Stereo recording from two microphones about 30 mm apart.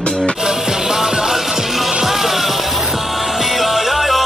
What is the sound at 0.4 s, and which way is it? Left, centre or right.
Music, centre.